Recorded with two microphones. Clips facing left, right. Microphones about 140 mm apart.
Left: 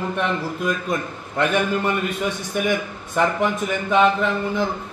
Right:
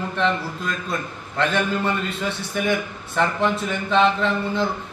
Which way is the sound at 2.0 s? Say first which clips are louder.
Left 2 dB; 15° left (ahead or behind).